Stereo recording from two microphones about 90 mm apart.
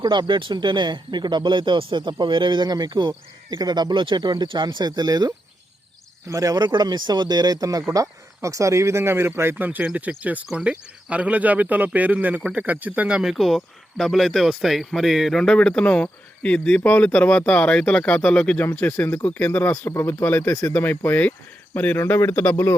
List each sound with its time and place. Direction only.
0.0 s speech: 55° right (ahead or behind); by 13.3 s 10° right (ahead or behind)
13.3 s speech: centre (ahead or behind); by 19.9 s 20° left (ahead or behind)
19.9 s speech: 35° left (ahead or behind)